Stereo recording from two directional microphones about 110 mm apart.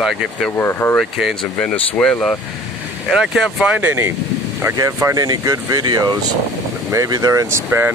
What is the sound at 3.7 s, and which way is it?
Speech, 15° right (ahead or behind).